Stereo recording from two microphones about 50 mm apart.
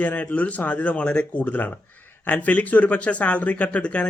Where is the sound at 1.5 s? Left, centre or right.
Left.